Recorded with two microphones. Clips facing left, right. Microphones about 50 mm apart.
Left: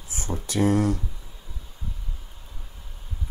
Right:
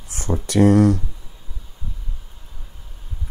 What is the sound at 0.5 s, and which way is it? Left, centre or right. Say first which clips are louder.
Speech: right 8 dB; right.